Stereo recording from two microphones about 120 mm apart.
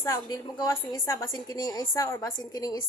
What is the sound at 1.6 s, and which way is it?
A woman's voice, 35° left (ahead or behind).